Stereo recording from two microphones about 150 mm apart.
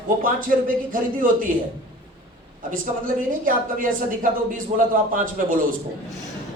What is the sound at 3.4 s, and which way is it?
Speech, 65° right (ahead or behind).